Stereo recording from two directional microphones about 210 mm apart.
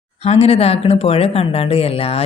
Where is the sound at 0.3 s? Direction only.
30° left (ahead or behind).